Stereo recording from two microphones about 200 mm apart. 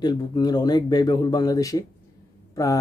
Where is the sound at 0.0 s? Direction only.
20° left (ahead or behind).